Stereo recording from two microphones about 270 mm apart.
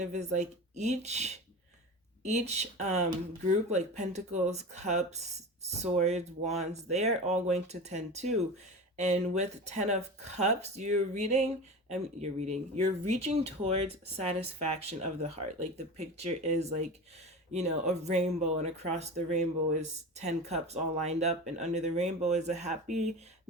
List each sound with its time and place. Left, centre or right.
0.0 s speech: right